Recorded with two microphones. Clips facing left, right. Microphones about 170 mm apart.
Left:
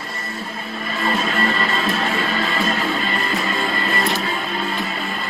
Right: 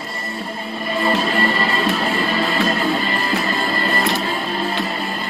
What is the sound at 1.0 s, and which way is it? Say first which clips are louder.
Music: right 2 dB; centre (ahead or behind).